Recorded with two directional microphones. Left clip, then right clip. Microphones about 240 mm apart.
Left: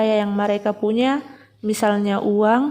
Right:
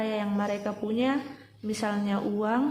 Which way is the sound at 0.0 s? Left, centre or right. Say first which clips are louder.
Left 11 dB; left.